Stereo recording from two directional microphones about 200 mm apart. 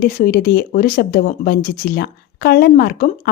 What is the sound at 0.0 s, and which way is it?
Speech, 50° left (ahead or behind).